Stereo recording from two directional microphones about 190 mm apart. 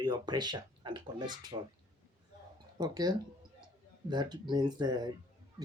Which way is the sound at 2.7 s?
20° right (ahead or behind).